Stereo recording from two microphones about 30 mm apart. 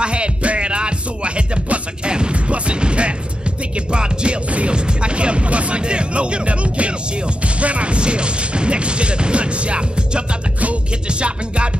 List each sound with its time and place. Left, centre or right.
0.0 s music: right
2.3 s music: right
3.7 s speech: right
4.5 s music: right
4.7 s speech: right